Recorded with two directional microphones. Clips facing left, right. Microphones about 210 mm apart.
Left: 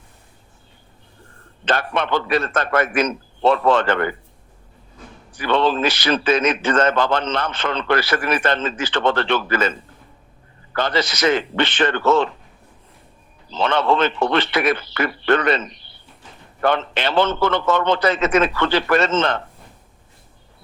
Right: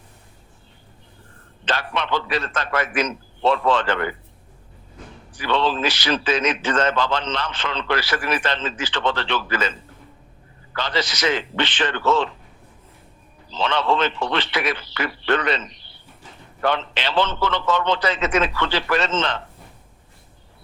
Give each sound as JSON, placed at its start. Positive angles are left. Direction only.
{"t": 1.6, "sound": "a man's voice", "side_deg": 55}
{"t": 5.4, "sound": "a man's voice", "side_deg": 55}
{"t": 10.8, "sound": "a man's voice", "side_deg": 55}
{"t": 13.5, "sound": "a man's voice", "side_deg": 50}